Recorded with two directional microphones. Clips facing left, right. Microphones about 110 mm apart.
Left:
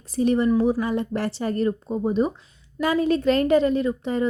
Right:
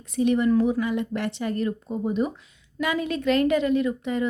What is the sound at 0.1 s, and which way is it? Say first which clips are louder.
A woman's voice: left 1 dB; 35° left (ahead or behind).